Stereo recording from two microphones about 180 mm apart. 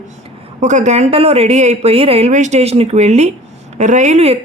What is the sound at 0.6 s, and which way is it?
Speech, 40° right (ahead or behind).